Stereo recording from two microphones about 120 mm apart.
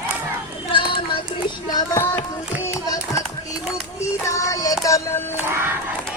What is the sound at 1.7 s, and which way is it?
Child singing, 25° left (ahead or behind).